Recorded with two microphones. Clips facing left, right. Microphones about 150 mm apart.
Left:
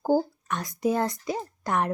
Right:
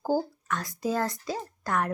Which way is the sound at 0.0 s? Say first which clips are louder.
Left 4 dB; 20° left (ahead or behind).